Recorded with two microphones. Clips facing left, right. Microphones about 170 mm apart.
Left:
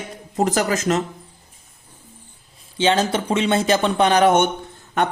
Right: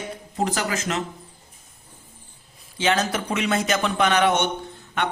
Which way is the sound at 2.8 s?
30° left (ahead or behind).